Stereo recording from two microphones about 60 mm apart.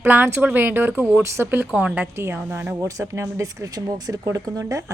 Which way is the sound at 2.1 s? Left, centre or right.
Right.